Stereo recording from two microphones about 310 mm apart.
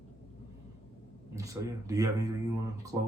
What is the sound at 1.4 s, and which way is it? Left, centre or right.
Speech, centre.